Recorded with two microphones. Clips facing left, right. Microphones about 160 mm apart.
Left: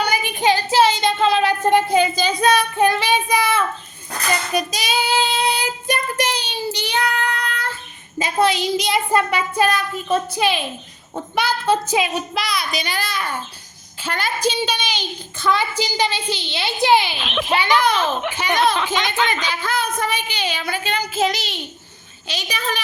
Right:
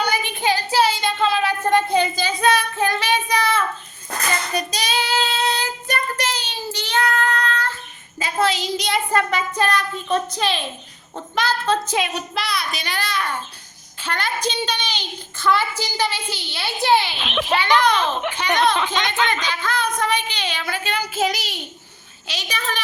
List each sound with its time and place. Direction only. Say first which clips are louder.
0.0 s child singing: left 3 dB; 15° left (ahead or behind)
8.2 s a woman's voice: left 3 dB; 15° left (ahead or behind)
17.2 s a child's voice: left 1 dB; centre (ahead or behind)